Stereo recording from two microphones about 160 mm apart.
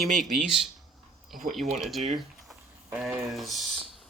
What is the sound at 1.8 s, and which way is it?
Speech, centre (ahead or behind).